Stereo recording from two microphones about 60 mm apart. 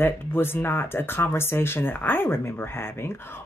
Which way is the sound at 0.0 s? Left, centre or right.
Left.